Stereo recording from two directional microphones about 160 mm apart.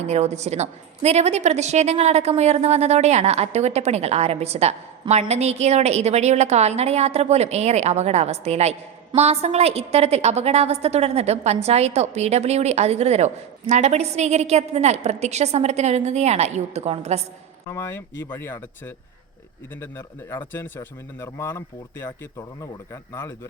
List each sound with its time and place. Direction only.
0.1 s a woman's voice: 45° right (ahead or behind)
17.7 s speech: 15° left (ahead or behind)